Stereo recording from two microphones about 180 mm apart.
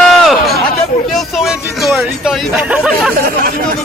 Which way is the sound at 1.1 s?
Centre (ahead or behind).